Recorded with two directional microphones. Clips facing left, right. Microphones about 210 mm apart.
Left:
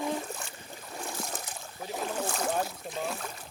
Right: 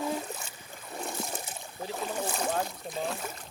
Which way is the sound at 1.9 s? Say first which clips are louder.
Left 1 dB; 5° right (ahead or behind).